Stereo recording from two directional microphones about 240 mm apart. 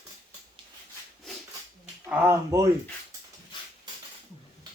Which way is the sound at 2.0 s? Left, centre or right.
Centre.